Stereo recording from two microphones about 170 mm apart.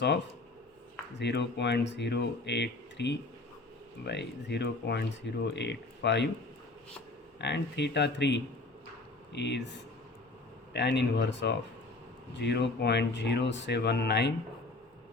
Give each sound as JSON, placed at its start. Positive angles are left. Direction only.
{"t": 1.2, "sound": "speech", "side_deg": 90}
{"t": 7.3, "sound": "speech", "side_deg": 90}
{"t": 10.8, "sound": "speech", "side_deg": 90}